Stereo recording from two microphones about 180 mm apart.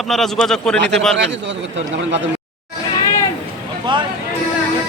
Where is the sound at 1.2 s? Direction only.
75° right (ahead or behind).